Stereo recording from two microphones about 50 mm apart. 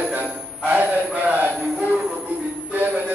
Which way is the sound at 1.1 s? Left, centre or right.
Right.